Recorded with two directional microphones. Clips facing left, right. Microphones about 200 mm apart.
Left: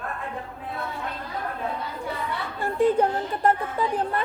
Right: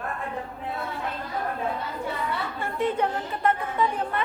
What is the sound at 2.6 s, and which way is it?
A woman's voice, 35° left (ahead or behind).